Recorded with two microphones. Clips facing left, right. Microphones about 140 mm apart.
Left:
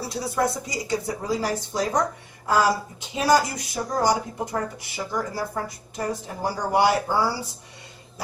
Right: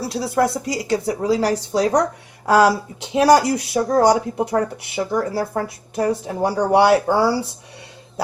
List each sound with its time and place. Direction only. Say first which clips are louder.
0.1 s speech: right 5 dB; 70° right (ahead or behind)